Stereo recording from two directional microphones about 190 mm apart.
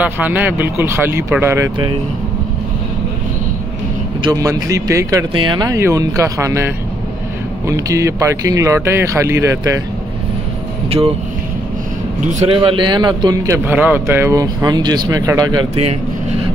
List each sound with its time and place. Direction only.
0.0 s speech: 10° right (ahead or behind)
4.2 s speech: 20° right (ahead or behind)
10.9 s speech: 30° right (ahead or behind)
12.3 s a man's voice: 30° right (ahead or behind)